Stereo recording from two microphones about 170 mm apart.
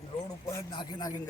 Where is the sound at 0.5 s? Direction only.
25° left (ahead or behind).